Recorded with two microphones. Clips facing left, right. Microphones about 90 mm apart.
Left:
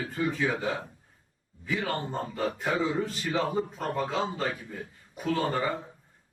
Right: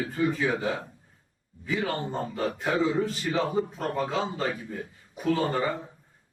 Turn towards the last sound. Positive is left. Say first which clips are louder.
# right 2 dB
turn(degrees=0)  # may be behind; listen again after turning